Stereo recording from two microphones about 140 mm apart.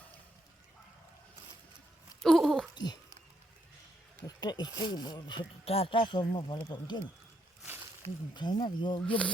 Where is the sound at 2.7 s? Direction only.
30° left (ahead or behind).